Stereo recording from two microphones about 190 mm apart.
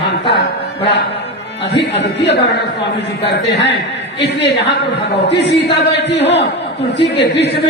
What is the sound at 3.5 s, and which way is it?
A woman's voice, 65° left (ahead or behind).